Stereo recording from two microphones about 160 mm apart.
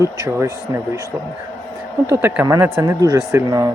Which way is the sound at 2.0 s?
15° right (ahead or behind).